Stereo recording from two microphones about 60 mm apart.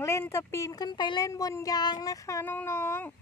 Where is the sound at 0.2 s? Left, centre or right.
Left.